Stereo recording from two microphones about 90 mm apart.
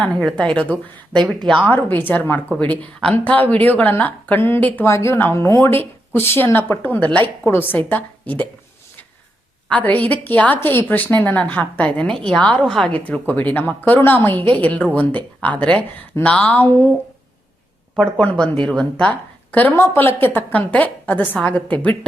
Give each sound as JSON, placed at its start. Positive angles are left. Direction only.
{"t": 0.3, "sound": "a woman's voice", "side_deg": 10}
{"t": 1.7, "sound": "a woman's voice", "side_deg": 20}
{"t": 9.6, "sound": "speech", "side_deg": 15}
{"t": 12.1, "sound": "a woman's voice", "side_deg": 5}
{"t": 17.9, "sound": "a woman's voice", "side_deg": 10}
{"t": 19.5, "sound": "a woman's voice", "side_deg": 20}
{"t": 19.7, "sound": "a woman's voice", "side_deg": 30}